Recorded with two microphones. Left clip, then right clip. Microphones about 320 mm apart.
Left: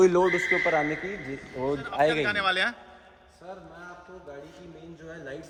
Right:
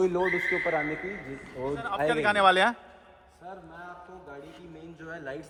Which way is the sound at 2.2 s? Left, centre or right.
Centre.